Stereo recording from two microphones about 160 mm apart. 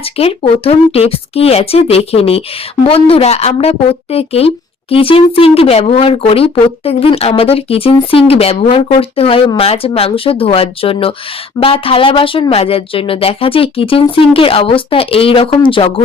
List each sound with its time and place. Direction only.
0.0 s a woman's voice: 35° left (ahead or behind)